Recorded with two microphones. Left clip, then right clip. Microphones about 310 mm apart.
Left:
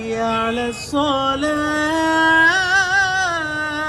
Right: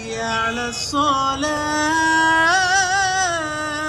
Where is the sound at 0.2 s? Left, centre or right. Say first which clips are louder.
Left 1 dB; centre.